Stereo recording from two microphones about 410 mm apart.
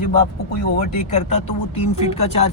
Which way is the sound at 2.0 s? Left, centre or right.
Centre.